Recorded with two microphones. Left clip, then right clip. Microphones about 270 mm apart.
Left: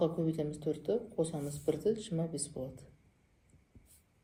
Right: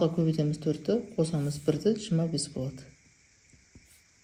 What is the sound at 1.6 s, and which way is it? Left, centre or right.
Speech, right.